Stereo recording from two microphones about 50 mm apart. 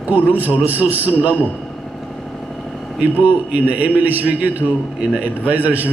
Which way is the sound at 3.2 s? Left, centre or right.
Right.